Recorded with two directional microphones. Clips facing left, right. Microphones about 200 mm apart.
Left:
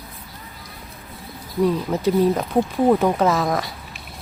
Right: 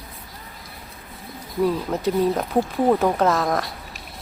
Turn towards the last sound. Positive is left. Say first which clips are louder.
# left 1 dB
turn(degrees=0)  # may be behind; listen again after turning